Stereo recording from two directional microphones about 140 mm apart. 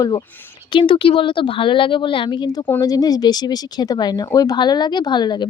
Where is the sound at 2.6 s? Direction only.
20° left (ahead or behind).